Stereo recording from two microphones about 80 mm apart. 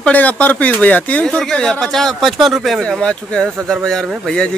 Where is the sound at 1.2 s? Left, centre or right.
Centre.